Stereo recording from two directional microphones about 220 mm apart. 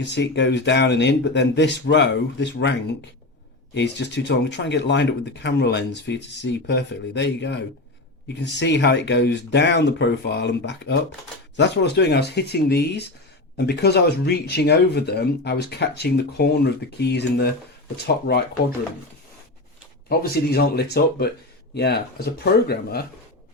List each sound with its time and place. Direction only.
0.0 s speech: 50° left (ahead or behind)
3.8 s speech: 50° left (ahead or behind)
20.1 s speech: 45° left (ahead or behind)